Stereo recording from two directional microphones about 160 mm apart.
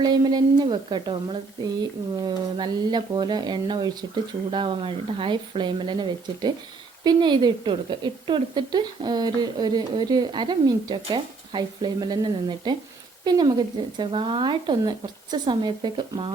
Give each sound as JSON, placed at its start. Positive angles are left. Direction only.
{"t": 0.0, "sound": "a woman's voice", "side_deg": -25}